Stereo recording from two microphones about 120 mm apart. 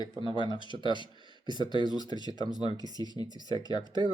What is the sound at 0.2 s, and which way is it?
Speech, 40° left (ahead or behind).